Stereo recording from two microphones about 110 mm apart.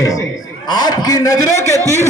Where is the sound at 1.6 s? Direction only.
30° right (ahead or behind).